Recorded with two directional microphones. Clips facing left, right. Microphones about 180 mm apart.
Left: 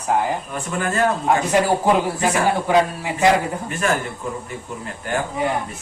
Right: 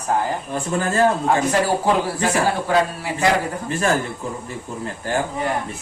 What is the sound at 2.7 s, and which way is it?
Speech, 20° left (ahead or behind).